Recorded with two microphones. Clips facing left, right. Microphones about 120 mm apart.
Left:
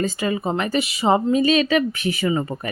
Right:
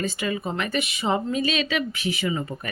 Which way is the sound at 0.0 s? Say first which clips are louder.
Left 5 dB; 35° left (ahead or behind).